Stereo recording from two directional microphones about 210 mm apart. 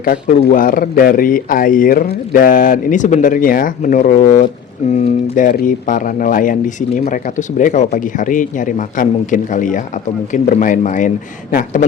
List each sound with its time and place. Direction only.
0.0 s speech: 40° left (ahead or behind)